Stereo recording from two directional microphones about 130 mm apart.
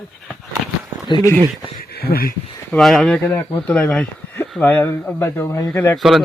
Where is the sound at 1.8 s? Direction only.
90° left.